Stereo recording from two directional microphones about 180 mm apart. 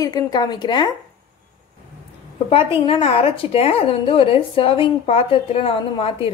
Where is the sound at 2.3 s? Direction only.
25° left (ahead or behind).